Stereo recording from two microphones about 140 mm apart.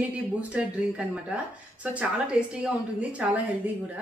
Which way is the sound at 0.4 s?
10° right (ahead or behind).